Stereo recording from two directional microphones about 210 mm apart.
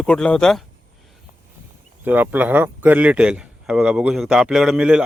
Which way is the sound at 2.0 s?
10° right (ahead or behind).